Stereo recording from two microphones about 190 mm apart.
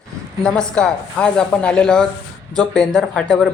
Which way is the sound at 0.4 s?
5° left (ahead or behind).